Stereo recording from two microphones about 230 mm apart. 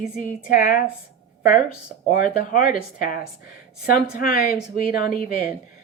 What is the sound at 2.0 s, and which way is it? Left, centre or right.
Speech, left.